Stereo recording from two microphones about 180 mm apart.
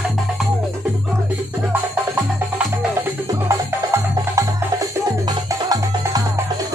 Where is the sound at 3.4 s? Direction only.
15° right (ahead or behind).